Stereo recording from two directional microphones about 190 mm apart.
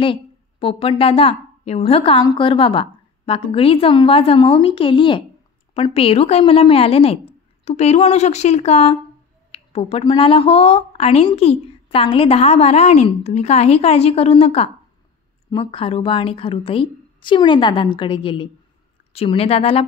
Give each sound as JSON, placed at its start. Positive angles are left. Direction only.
{"t": 0.0, "sound": "a woman's voice", "side_deg": 30}